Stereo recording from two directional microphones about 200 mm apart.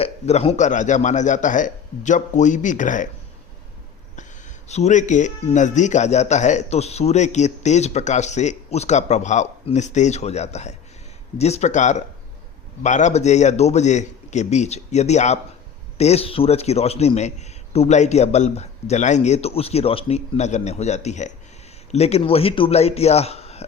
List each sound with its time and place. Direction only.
0.0 s speech: 30° left (ahead or behind)
4.7 s speech: 35° left (ahead or behind)